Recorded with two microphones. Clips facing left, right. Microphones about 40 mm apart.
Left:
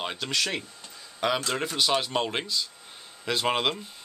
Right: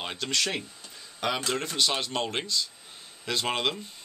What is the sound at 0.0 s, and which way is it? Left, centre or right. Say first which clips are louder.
Speech: left 1 dB; centre.